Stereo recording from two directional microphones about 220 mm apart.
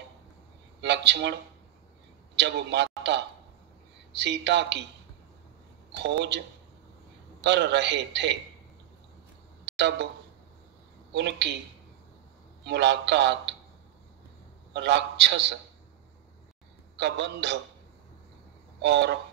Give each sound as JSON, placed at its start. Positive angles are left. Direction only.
{"t": 0.7, "sound": "a man's voice", "side_deg": -55}
{"t": 2.3, "sound": "a man's voice", "side_deg": -50}
{"t": 5.9, "sound": "speech", "side_deg": -50}
{"t": 7.4, "sound": "a man's voice", "side_deg": -50}
{"t": 9.7, "sound": "speech", "side_deg": -50}
{"t": 11.1, "sound": "a man's voice", "side_deg": -50}
{"t": 12.6, "sound": "a man's voice", "side_deg": -50}
{"t": 14.7, "sound": "a man's voice", "side_deg": -50}
{"t": 16.9, "sound": "a man's voice", "side_deg": -55}
{"t": 18.8, "sound": "a man's voice", "side_deg": -50}